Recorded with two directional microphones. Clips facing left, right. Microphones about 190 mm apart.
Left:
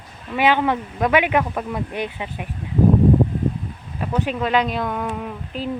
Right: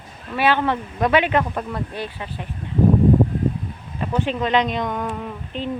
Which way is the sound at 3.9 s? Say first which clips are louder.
Even; 5° left (ahead or behind).